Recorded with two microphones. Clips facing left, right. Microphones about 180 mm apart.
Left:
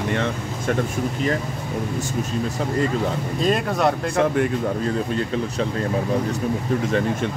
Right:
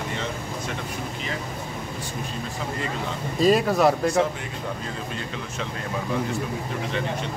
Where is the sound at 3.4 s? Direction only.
Centre (ahead or behind).